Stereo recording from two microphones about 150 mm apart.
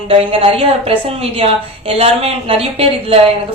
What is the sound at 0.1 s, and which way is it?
A woman's voice, 40° right (ahead or behind).